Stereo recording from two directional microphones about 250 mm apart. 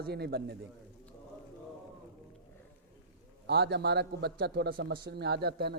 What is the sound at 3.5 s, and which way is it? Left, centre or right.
A man's voice, right.